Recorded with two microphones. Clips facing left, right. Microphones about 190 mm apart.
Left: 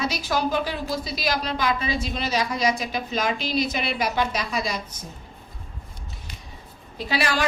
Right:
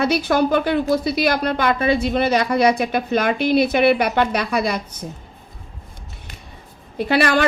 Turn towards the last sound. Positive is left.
turn(degrees=-60)  # may be behind; listen again after turning